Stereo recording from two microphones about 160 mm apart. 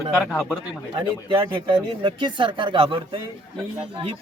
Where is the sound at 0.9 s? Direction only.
30° right (ahead or behind).